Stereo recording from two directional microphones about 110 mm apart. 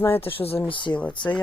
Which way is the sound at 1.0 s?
10° left (ahead or behind).